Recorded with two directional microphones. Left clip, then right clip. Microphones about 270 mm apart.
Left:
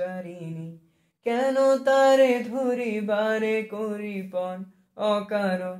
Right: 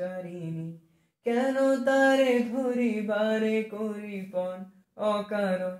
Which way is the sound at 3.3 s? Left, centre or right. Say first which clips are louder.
Left 2 dB; left.